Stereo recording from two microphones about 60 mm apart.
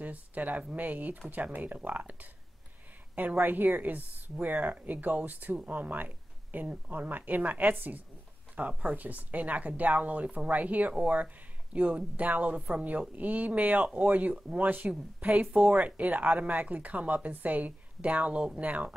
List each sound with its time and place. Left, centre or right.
0.0 s speech: right
3.3 s a woman's voice: right